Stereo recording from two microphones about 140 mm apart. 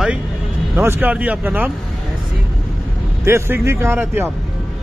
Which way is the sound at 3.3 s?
15° right (ahead or behind).